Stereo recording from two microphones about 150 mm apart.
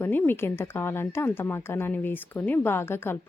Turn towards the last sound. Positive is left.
turn(degrees=15)  # may be behind; listen again after turning